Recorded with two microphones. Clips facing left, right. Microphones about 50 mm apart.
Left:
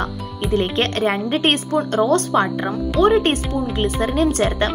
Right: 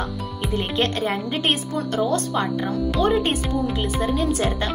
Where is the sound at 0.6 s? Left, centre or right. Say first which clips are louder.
Left 3 dB; left.